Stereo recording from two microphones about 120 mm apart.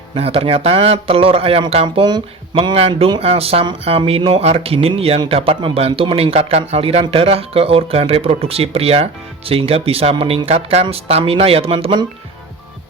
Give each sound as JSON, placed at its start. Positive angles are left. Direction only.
{"t": 0.1, "sound": "speech", "side_deg": -50}
{"t": 2.0, "sound": "speech", "side_deg": -35}
{"t": 2.7, "sound": "speech", "side_deg": -55}